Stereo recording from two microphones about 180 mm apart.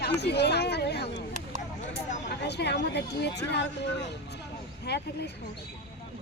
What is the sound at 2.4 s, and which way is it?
Speech, 70° left (ahead or behind).